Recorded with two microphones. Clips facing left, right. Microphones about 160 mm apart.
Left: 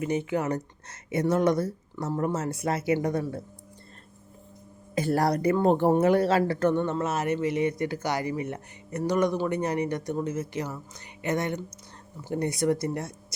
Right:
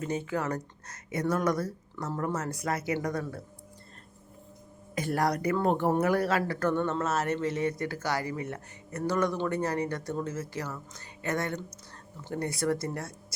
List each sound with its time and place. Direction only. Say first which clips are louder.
0.0 s speech: left 4 dB; 15° left (ahead or behind)
4.9 s a woman's voice: left 4 dB; 30° left (ahead or behind)